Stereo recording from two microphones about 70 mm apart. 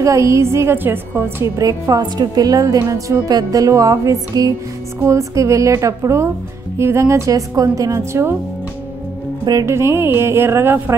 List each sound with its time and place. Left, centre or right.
0.0 s a woman's voice: right
1.6 s a woman's voice: right
9.7 s a woman's voice: right